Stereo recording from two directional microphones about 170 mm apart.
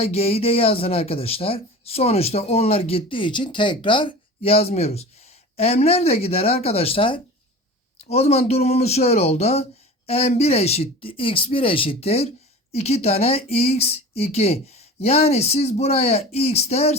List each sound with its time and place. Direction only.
0.0 s speech: 35° left (ahead or behind)